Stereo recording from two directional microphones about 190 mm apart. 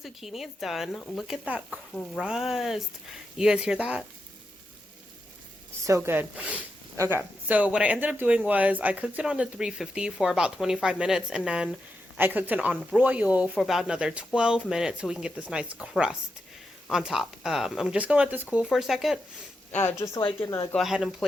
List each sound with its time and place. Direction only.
0.0 s speech: centre (ahead or behind)
5.8 s speech: 15° right (ahead or behind)
19.7 s a woman's voice: 15° left (ahead or behind)
20.7 s speech: centre (ahead or behind)